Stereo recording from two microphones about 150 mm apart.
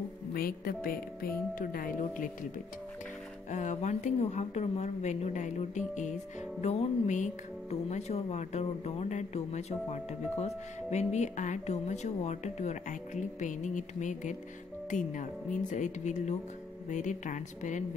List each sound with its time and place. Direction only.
0.3 s a woman's voice: 80° left; by 2.3 s 60° left (ahead or behind)
3.4 s speech: 55° left (ahead or behind)